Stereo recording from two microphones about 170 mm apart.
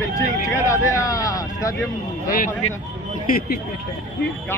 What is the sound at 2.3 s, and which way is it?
Speech, 50° left (ahead or behind).